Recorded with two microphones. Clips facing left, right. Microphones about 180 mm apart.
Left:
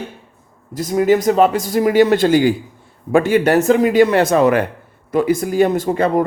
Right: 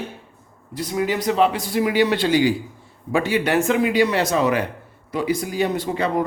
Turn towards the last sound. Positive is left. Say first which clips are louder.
# left 6 dB
turn(degrees=50)  # may be behind; listen again after turning